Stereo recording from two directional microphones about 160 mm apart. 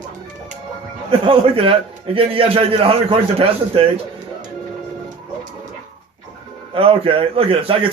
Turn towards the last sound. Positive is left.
turn(degrees=-35)  # may be behind; listen again after turning